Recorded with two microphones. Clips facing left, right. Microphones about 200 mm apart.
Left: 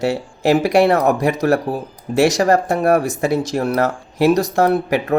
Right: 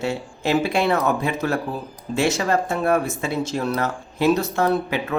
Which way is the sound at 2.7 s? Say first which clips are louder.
Left 3 dB; 40° left (ahead or behind).